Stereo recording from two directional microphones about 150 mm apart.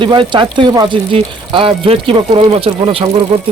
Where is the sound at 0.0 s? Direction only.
30° right (ahead or behind).